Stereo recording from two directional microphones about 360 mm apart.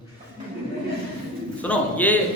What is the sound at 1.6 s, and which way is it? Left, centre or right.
Speech, centre.